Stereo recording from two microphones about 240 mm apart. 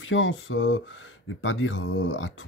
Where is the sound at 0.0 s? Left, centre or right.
Left.